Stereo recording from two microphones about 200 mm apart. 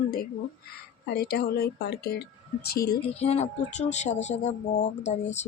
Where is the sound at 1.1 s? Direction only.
50° left (ahead or behind).